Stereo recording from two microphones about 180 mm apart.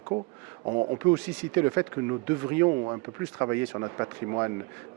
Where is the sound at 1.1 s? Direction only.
15° right (ahead or behind).